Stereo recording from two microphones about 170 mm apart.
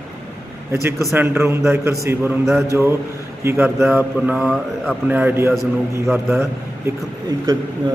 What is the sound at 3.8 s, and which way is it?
Mantra, 5° right (ahead or behind).